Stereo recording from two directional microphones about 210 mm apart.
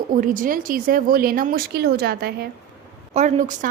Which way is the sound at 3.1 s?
35° right (ahead or behind).